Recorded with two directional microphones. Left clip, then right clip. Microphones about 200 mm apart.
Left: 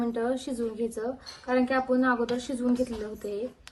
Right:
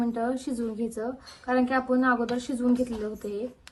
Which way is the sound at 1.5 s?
Centre (ahead or behind).